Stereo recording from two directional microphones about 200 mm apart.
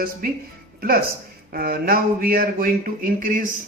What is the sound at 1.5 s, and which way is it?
Speech, 50° right (ahead or behind).